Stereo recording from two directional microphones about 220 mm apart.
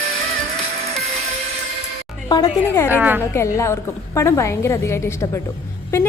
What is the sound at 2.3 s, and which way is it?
Speech, 20° left (ahead or behind).